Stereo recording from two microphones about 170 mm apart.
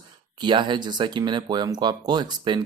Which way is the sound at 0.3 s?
25° right (ahead or behind).